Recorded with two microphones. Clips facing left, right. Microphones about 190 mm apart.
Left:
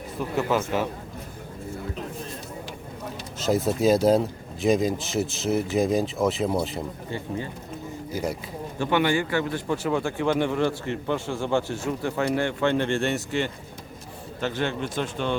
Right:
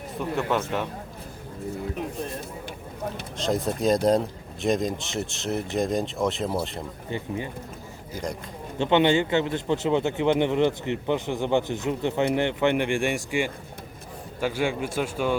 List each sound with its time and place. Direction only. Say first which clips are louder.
0.2 s speech: left 1 dB; centre (ahead or behind)
3.3 s speech: left 3 dB; 5° left (ahead or behind)
7.1 s speech: right 3 dB; 15° right (ahead or behind)
8.1 s speech: left 3 dB; 5° left (ahead or behind)
8.8 s speech: right 3 dB; 20° right (ahead or behind)